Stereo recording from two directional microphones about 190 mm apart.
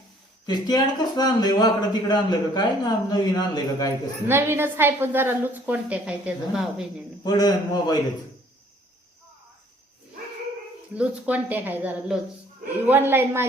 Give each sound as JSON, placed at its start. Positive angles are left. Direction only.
{"t": 0.4, "sound": "speech", "side_deg": 20}
{"t": 4.3, "sound": "a woman's voice", "side_deg": -10}
{"t": 7.3, "sound": "speech", "side_deg": 20}
{"t": 10.9, "sound": "a woman's voice", "side_deg": -5}